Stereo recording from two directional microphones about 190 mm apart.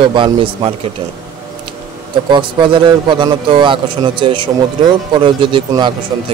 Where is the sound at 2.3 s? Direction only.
25° right (ahead or behind).